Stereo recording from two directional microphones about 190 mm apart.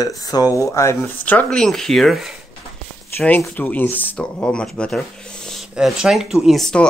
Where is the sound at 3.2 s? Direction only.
10° left (ahead or behind).